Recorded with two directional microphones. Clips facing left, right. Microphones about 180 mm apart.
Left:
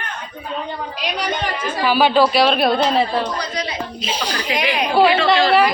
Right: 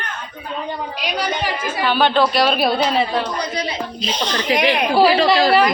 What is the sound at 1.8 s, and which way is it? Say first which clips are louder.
A woman's voice: left 2 dB; 5° left (ahead or behind).